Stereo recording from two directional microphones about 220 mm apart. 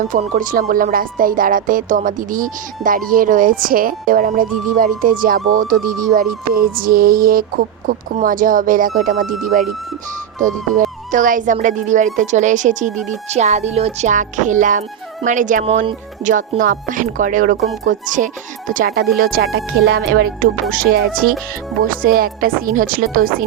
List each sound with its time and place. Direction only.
0.1 s speech: 40° right (ahead or behind)
11.1 s speech: 35° right (ahead or behind)